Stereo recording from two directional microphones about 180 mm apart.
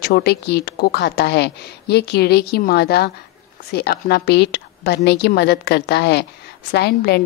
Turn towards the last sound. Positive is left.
turn(degrees=65)  # may be behind; listen again after turning